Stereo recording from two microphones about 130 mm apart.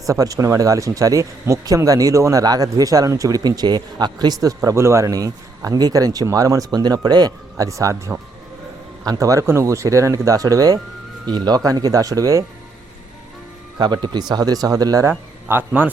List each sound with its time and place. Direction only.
0.0 s speech: 25° right (ahead or behind)
13.7 s speech: 35° right (ahead or behind)
15.4 s speech: 15° right (ahead or behind)